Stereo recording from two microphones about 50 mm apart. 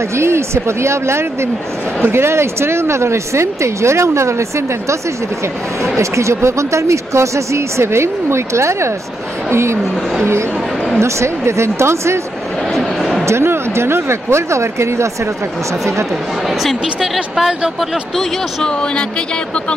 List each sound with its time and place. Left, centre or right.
0.2 s speech: right
5.9 s speech: right
11.0 s speech: right
12.7 s a sound: centre
13.3 s speech: right
16.4 s a woman's voice: centre